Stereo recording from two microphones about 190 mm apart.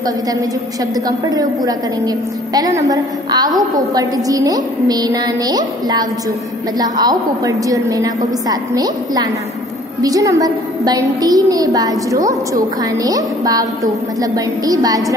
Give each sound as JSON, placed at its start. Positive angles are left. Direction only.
{"t": 1.0, "sound": "a woman's voice", "side_deg": -20}